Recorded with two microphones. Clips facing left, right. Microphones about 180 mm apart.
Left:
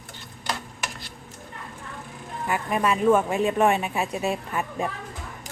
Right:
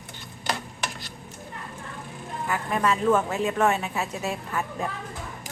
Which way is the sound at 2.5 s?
15° left (ahead or behind).